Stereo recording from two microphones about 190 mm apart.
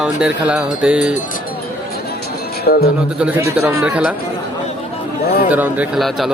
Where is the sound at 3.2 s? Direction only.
10° right (ahead or behind).